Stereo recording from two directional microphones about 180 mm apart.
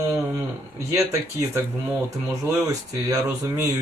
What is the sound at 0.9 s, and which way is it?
Speech, 15° right (ahead or behind).